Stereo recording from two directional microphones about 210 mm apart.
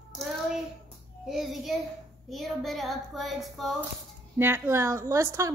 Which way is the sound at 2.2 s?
Centre (ahead or behind).